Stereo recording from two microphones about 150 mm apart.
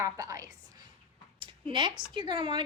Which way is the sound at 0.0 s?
20° right (ahead or behind).